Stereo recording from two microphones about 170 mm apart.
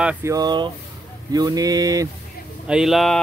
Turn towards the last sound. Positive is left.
turn(degrees=0)  # may be behind; listen again after turning